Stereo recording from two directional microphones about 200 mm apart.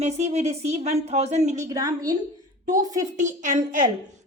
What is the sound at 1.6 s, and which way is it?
A woman's voice, 15° right (ahead or behind).